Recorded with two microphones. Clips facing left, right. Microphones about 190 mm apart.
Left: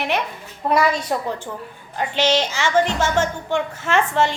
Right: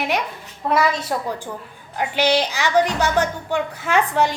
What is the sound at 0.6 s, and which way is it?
Speech, centre (ahead or behind).